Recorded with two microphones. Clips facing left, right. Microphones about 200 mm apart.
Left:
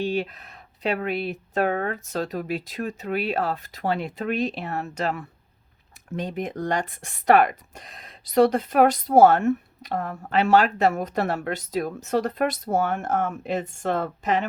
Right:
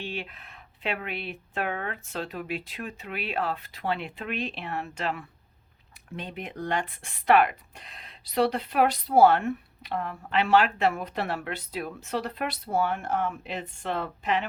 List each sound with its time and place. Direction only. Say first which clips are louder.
0.0 s speech: left 10 dB; 40° left (ahead or behind)